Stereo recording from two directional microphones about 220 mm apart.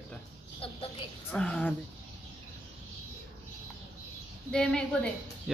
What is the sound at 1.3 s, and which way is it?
Speech, 5° left (ahead or behind).